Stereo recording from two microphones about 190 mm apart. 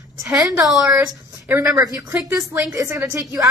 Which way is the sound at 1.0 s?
20° right (ahead or behind).